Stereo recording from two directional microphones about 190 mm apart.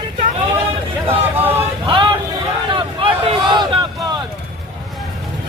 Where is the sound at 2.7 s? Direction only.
25° right (ahead or behind).